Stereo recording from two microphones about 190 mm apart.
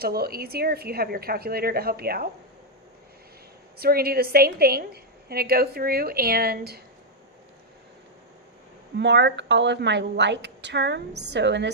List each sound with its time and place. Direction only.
0.0 s a woman's voice: 55° right (ahead or behind)
3.8 s a woman's voice: 55° right (ahead or behind)
9.0 s a woman's voice: 65° right (ahead or behind)